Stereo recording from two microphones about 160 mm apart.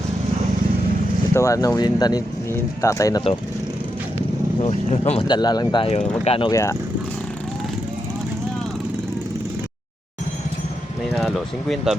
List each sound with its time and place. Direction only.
1.3 s speech: 20° left (ahead or behind)
4.6 s speech: 40° left (ahead or behind)
5.3 s speech: 25° left (ahead or behind)
6.5 s speech: 20° left (ahead or behind)
11.1 s a sound: centre (ahead or behind)